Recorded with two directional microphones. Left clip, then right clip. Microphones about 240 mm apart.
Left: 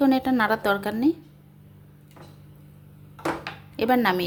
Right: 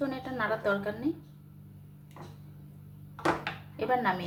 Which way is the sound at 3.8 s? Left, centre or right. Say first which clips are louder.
Left 7 dB; left.